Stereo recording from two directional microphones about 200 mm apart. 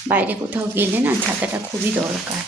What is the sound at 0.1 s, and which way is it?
A woman's voice, 10° right (ahead or behind).